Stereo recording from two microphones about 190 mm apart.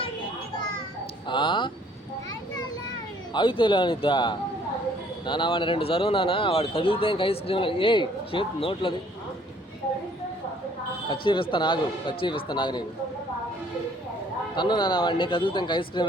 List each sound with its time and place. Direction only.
1.3 s speech: 25° left (ahead or behind)
3.3 s speech: 25° left (ahead or behind)
11.1 s speech: 25° left (ahead or behind)
14.5 s speech: 25° left (ahead or behind)